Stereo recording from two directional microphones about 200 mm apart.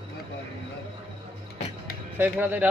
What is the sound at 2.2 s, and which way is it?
Speech, 10° right (ahead or behind).